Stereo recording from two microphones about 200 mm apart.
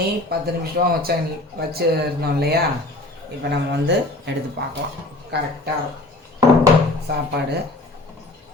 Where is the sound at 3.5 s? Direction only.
55° right (ahead or behind).